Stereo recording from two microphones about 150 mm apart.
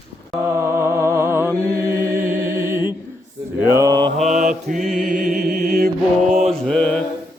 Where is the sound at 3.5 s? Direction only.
20° right (ahead or behind).